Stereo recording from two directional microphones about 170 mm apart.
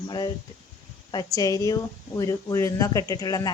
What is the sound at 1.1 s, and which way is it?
Speech, 20° left (ahead or behind).